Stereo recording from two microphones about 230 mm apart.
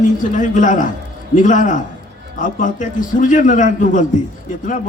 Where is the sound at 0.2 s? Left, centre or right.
Left.